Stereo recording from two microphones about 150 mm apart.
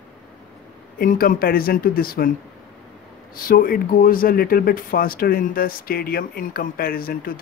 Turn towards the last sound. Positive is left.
turn(degrees=75)  # may be behind; listen again after turning